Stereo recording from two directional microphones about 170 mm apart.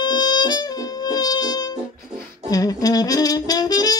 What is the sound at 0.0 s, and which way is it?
Music, 25° left (ahead or behind).